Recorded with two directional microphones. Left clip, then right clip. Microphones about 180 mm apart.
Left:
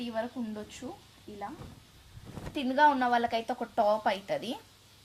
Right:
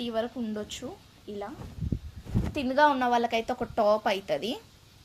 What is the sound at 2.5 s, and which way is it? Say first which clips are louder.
A woman's voice: right 1 dB; 40° right (ahead or behind).